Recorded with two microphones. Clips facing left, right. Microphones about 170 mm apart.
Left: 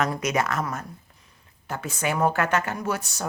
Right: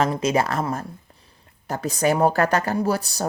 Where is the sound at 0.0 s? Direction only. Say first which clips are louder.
Right 4 dB; 30° right (ahead or behind).